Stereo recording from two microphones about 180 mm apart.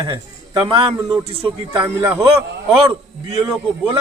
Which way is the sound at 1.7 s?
15° right (ahead or behind).